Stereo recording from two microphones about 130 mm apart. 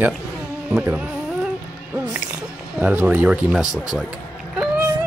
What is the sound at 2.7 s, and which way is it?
Speech, 10° right (ahead or behind).